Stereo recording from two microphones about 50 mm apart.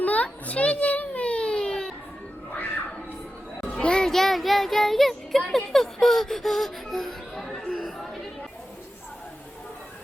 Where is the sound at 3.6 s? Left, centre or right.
Centre.